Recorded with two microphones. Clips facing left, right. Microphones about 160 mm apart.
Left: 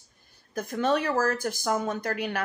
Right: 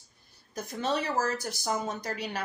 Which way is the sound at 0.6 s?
50° left (ahead or behind).